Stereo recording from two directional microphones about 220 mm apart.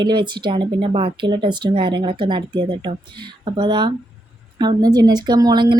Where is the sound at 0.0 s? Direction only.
20° right (ahead or behind).